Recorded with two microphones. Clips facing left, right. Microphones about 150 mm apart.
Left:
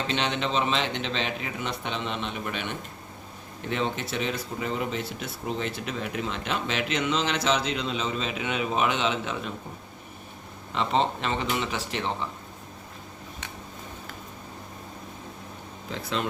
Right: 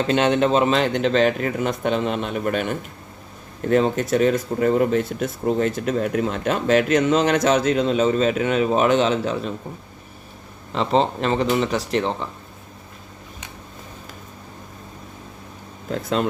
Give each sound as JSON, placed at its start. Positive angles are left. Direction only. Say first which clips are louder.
{"t": 0.1, "sound": "speech", "louder": "right 11 dB", "side_deg": -45}
{"t": 10.8, "sound": "speech", "louder": "right 6 dB", "side_deg": -35}
{"t": 15.9, "sound": "speech", "louder": "right 8 dB", "side_deg": -45}